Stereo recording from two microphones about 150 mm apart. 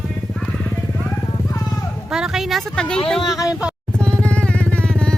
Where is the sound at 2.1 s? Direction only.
5° right (ahead or behind).